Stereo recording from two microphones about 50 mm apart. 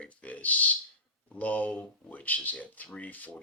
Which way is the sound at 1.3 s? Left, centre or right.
Left.